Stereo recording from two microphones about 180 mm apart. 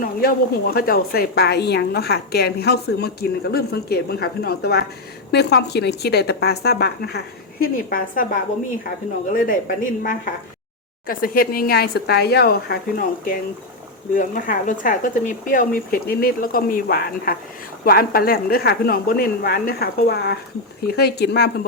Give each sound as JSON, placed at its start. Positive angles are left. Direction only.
{"t": 0.0, "sound": "a woman's voice", "side_deg": 55}